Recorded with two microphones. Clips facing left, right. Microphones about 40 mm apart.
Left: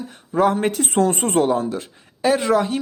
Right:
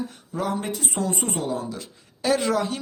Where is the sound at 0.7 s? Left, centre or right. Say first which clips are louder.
Left 8 dB; left.